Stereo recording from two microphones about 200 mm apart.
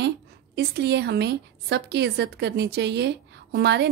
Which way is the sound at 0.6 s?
55° right (ahead or behind).